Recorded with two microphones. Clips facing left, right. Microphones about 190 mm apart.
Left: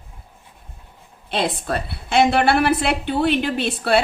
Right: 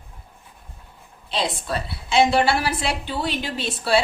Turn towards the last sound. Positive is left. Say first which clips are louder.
# left 3 dB
turn(degrees=55)  # may be behind; listen again after turning